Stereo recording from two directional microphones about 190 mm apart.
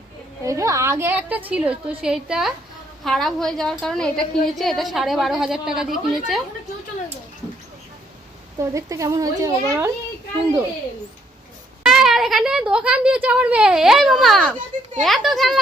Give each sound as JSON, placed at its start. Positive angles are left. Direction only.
{"t": 0.4, "sound": "a woman's voice", "side_deg": -15}
{"t": 8.5, "sound": "a woman's voice", "side_deg": -15}
{"t": 11.8, "sound": "a woman's voice", "side_deg": 0}